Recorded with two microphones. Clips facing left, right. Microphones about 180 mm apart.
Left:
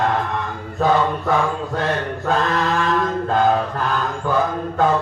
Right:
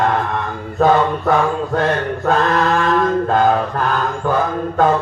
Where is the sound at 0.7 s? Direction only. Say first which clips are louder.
Right 4 dB; 55° right (ahead or behind).